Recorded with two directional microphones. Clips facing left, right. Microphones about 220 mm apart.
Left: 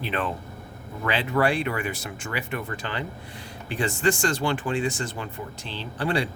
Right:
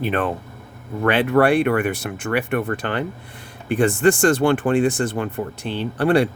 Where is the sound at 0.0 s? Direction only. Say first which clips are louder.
Right 7 dB; 50° right (ahead or behind).